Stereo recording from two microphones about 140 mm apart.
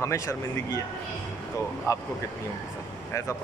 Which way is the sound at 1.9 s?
20° left (ahead or behind).